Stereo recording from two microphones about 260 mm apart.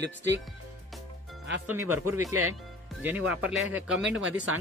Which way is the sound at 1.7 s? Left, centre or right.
Centre.